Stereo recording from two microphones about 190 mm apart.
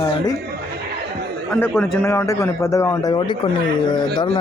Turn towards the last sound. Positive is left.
turn(degrees=30)  # may be behind; listen again after turning